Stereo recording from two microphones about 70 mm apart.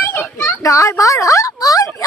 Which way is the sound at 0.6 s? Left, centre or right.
Left.